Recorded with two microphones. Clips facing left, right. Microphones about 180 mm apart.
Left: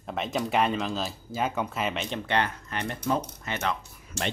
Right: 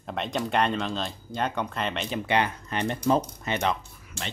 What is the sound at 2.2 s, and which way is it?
Speech, 15° right (ahead or behind).